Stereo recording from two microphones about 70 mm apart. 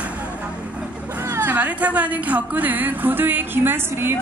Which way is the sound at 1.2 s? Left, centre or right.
Right.